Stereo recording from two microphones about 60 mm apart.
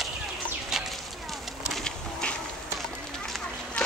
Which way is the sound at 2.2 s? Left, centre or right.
Centre.